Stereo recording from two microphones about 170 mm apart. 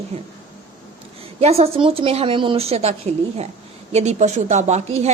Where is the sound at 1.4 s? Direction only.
35° right (ahead or behind).